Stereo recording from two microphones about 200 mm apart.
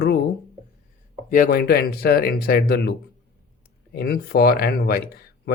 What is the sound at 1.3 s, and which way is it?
Speech, 45° left (ahead or behind).